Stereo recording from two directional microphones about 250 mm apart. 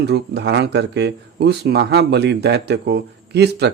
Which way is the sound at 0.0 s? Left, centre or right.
Right.